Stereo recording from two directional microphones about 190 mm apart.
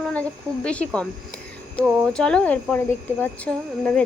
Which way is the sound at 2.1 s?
5° left (ahead or behind).